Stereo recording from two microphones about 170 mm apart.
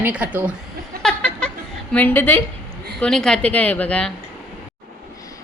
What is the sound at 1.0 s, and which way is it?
Chuckle, 5° left (ahead or behind).